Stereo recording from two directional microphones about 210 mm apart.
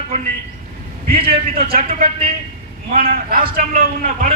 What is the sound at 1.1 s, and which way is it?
A man's voice, 45° right (ahead or behind).